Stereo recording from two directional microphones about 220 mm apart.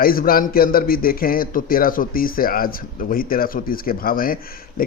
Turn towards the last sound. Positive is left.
turn(degrees=40)  # may be behind; listen again after turning